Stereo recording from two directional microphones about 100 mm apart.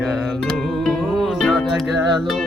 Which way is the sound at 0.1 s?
Centre (ahead or behind).